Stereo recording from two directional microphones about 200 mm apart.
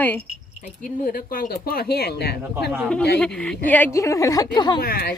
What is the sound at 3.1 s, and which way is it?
A woman's voice, 5° left (ahead or behind).